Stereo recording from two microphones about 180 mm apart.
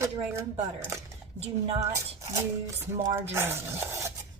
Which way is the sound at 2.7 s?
15° right (ahead or behind).